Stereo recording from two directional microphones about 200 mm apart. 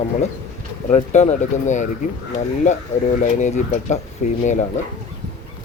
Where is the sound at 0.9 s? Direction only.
35° left (ahead or behind).